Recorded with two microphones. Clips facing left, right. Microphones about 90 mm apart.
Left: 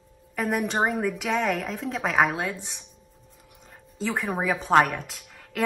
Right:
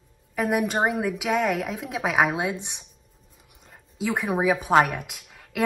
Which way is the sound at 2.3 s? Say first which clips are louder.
Right 3 dB; 20° right (ahead or behind).